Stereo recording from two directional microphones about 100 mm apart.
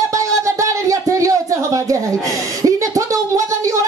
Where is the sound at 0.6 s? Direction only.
30° right (ahead or behind).